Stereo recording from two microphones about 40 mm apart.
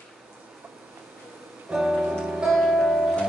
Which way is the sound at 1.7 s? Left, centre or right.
Centre.